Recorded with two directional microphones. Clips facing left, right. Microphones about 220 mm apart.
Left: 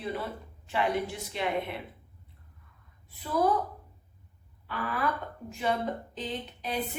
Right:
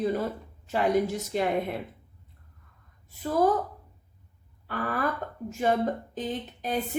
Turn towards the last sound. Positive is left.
turn(degrees=-45)  # may be behind; listen again after turning